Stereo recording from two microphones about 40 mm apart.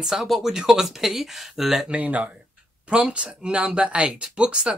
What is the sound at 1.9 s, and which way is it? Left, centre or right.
Speech, right.